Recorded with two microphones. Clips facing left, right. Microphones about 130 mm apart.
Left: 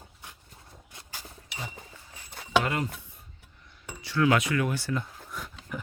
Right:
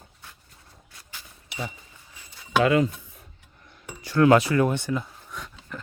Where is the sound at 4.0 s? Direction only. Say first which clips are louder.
Right 7 dB; 45° right (ahead or behind).